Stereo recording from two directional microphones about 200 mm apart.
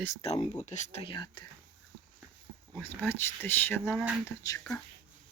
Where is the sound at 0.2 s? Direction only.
35° left (ahead or behind).